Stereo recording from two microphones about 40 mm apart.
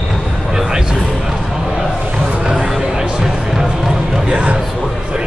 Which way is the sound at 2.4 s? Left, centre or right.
Right.